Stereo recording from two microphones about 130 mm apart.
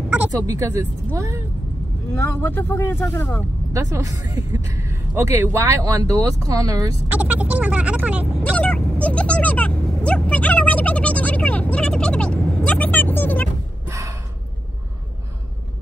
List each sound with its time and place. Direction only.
0.5 s a woman's voice: 20° right (ahead or behind)
2.1 s speech: 15° left (ahead or behind)
3.9 s a woman's voice: 25° right (ahead or behind)
7.1 s speech: 10° right (ahead or behind)
8.5 s a sound: 10° left (ahead or behind)
13.8 s gasp: 25° right (ahead or behind)